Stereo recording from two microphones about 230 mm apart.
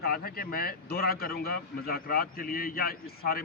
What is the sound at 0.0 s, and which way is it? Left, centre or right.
A man's voice, left.